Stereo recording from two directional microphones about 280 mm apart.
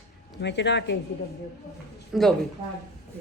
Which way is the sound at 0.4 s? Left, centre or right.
Left.